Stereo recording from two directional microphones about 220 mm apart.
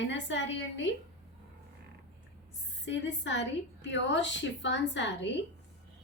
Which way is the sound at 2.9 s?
55° left (ahead or behind).